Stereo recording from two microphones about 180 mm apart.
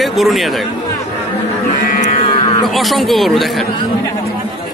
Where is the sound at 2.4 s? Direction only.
30° left (ahead or behind).